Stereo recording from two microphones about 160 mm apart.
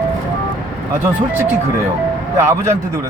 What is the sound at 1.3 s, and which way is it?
Speech, 15° right (ahead or behind).